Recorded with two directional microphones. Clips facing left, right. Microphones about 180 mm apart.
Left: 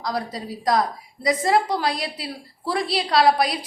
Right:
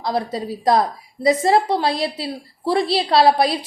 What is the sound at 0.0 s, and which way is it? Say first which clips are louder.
A woman's voice: right 5 dB; 25° right (ahead or behind).